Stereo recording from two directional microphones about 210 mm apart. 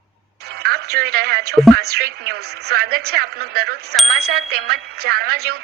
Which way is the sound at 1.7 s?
50° right (ahead or behind).